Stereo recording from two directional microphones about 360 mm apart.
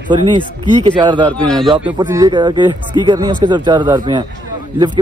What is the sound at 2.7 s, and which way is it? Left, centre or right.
Speech, centre.